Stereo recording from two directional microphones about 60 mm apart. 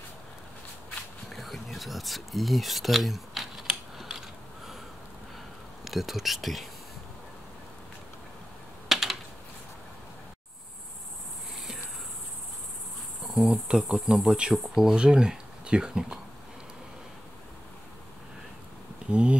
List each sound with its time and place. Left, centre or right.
1.3 s speech: centre
5.9 s speech: centre
8.8 s typing: centre
13.3 s insect: centre
14.5 s speech: centre
19.0 s speech: centre